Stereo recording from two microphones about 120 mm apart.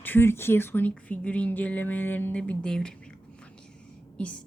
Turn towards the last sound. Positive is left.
turn(degrees=10)  # may be behind; listen again after turning